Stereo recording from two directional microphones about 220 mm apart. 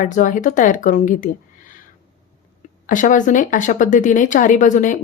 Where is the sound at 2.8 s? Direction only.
35° left (ahead or behind).